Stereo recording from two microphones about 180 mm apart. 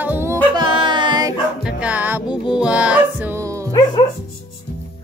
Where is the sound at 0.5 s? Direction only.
25° right (ahead or behind).